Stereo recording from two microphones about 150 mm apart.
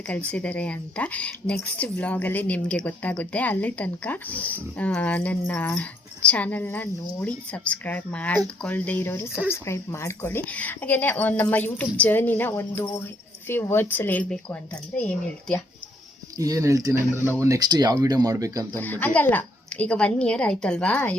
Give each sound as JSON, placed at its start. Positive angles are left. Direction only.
{"t": 0.3, "sound": "a woman's voice", "side_deg": 10}
{"t": 16.4, "sound": "speech", "side_deg": -20}
{"t": 18.8, "sound": "a woman's voice", "side_deg": 10}